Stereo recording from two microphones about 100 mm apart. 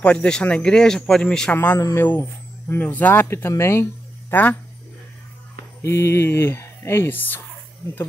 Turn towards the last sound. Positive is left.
turn(degrees=20)  # may be behind; listen again after turning